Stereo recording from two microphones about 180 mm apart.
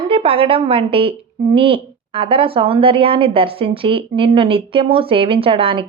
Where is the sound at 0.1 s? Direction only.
30° right (ahead or behind).